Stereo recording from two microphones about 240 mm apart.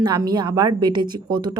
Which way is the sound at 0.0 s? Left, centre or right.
Centre.